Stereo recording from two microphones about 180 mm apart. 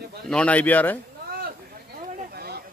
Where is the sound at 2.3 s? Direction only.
60° right (ahead or behind).